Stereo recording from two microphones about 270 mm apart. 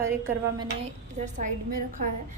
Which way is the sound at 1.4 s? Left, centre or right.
Right.